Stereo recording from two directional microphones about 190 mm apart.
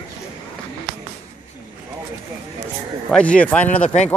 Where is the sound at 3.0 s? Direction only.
5° left (ahead or behind).